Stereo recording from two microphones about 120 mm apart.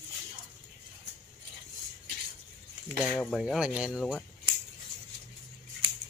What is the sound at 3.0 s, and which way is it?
Speech, centre (ahead or behind).